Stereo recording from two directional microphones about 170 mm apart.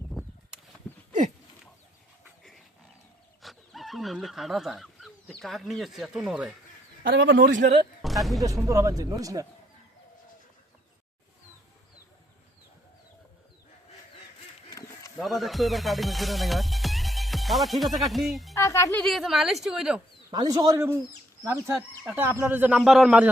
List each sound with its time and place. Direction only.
0.2 s a sound: centre (ahead or behind)
3.4 s speech: centre (ahead or behind)
7.0 s a man's voice: 80° right
8.0 s speech: centre (ahead or behind)
8.4 s speech: 20° right (ahead or behind)
15.2 s music: centre (ahead or behind)
18.0 s a woman's voice: centre (ahead or behind)
18.5 s a child's voice: 20° left (ahead or behind)
19.0 s a woman's voice: centre (ahead or behind)
20.3 s speech: 25° right (ahead or behind)
22.0 s speech: 10° right (ahead or behind)